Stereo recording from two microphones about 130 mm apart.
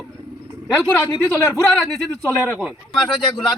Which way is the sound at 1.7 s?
Centre (ahead or behind).